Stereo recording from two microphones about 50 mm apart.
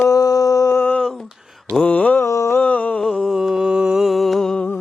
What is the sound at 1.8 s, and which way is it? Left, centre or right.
Mantra, left.